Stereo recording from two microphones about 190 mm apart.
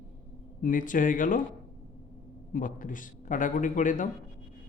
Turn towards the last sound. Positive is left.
turn(degrees=45)  # may be behind; listen again after turning